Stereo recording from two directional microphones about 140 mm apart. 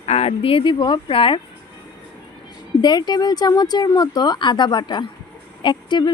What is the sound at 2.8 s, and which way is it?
Speech, 30° left (ahead or behind).